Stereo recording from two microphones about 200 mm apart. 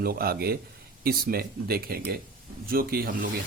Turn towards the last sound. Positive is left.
turn(degrees=-45)  # may be behind; listen again after turning